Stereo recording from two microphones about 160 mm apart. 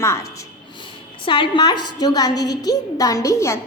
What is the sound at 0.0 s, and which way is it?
Speech, 15° left (ahead or behind).